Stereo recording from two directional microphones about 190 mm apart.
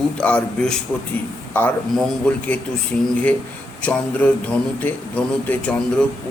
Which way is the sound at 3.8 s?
10° left (ahead or behind).